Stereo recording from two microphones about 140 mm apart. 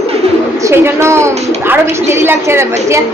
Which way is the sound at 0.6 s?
20° right (ahead or behind).